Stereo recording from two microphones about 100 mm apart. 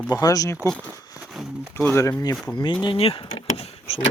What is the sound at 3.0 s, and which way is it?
Vehicle, 75° left (ahead or behind).